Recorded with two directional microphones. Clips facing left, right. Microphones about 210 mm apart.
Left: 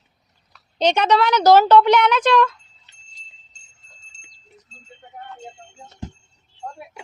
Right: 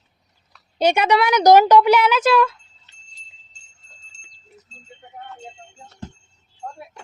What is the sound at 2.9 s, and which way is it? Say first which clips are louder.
Wind chime: right 1 dB; 15° left (ahead or behind).